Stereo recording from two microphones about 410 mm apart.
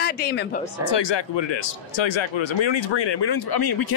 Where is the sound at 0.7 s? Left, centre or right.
Left.